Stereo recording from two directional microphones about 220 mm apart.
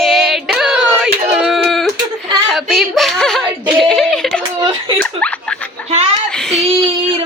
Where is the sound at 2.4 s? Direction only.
Centre (ahead or behind).